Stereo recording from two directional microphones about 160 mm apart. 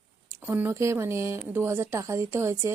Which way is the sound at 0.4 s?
15° right (ahead or behind).